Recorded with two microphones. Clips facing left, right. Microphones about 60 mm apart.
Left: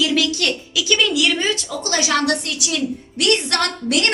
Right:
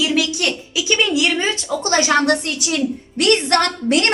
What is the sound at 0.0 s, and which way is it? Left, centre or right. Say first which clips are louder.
A woman's voice: even; centre.